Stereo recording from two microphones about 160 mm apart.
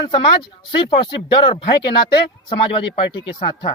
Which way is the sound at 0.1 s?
30° left (ahead or behind).